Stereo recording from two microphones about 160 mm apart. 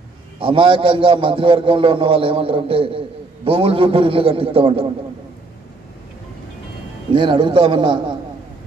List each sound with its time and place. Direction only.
0.4 s a man's voice: 35° right (ahead or behind)
7.1 s a man's voice: 30° right (ahead or behind)